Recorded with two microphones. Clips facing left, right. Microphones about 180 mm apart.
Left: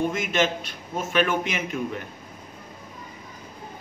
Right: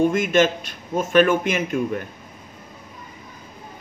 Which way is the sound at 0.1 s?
50° right (ahead or behind).